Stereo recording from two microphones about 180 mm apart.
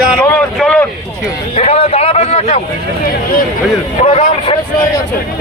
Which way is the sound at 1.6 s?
35° left (ahead or behind).